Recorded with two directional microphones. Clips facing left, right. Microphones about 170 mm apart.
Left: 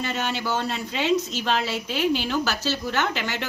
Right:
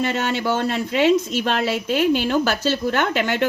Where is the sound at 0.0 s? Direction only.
60° right (ahead or behind).